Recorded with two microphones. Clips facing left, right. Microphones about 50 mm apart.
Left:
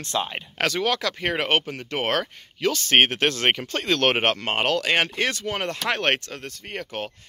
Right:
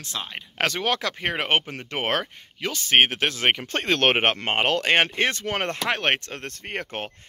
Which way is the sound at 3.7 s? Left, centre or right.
Right.